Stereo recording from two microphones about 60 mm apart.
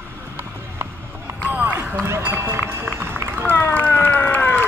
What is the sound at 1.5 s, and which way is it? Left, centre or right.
Run, right.